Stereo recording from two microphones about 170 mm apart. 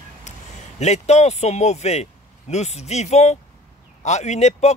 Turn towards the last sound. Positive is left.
turn(degrees=40)  # may be behind; listen again after turning